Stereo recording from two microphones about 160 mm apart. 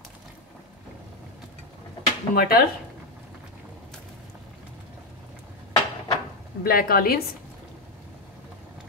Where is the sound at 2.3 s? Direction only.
70° left (ahead or behind).